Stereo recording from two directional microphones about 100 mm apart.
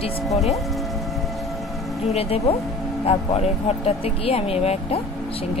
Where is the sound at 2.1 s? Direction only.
90° left.